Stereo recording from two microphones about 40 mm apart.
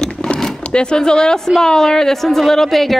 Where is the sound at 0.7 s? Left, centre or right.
Left.